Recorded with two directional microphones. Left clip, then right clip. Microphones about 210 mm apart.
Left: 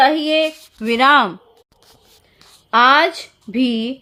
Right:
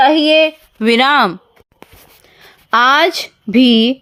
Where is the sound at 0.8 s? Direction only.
40° right (ahead or behind).